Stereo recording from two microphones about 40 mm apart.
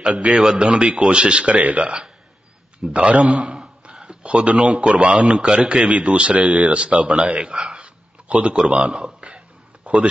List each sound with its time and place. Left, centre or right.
0.1 s a man's voice: right
0.4 s a man's voice: right
2.9 s a man's voice: right
8.3 s a man's voice: right
9.2 s a sound: right